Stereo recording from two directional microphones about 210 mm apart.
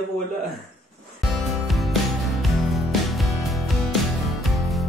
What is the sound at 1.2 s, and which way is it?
Music, centre (ahead or behind).